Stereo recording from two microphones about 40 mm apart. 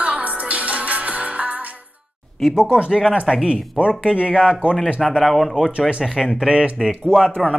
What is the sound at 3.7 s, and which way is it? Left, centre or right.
Speech, right.